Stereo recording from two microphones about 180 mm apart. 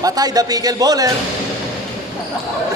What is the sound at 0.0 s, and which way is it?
Speech, 20° right (ahead or behind).